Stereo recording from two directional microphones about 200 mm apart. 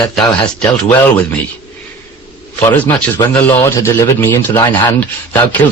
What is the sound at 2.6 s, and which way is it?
A man's voice, 10° left (ahead or behind).